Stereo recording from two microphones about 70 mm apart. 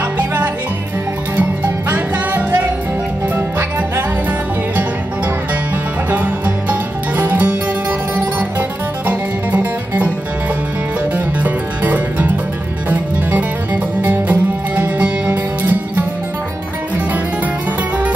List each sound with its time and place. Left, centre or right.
0.2 s music: right
6.0 s music: right
11.1 s music: right